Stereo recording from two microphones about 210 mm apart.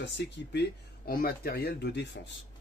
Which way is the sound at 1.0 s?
45° left (ahead or behind).